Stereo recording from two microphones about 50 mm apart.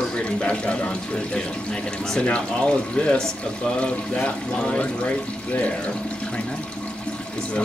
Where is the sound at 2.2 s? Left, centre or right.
Left.